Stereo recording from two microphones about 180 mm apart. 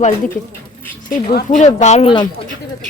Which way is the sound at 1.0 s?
50° left (ahead or behind).